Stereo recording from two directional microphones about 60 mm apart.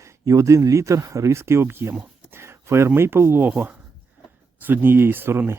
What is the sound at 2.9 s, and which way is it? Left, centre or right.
Speech, right.